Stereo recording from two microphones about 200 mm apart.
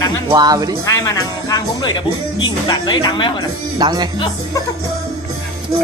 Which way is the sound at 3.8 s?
20° right (ahead or behind).